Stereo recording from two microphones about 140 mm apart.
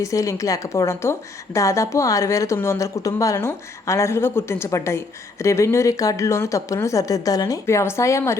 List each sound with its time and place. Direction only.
0.0 s a woman's voice: 20° left (ahead or behind)